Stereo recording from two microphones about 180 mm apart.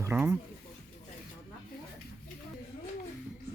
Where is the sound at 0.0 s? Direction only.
10° right (ahead or behind).